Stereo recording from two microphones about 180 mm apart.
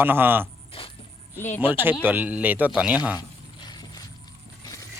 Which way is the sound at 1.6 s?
10° right (ahead or behind).